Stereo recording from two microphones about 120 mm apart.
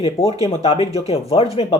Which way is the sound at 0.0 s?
55° left (ahead or behind).